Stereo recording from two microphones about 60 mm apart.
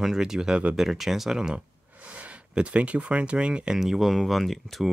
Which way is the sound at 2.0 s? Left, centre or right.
Right.